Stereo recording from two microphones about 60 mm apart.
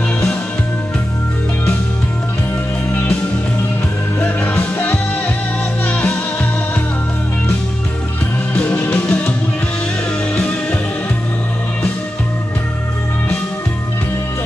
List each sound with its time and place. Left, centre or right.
2.9 s music: left
4.4 s music: left
8.5 s music: left
10.3 s music: left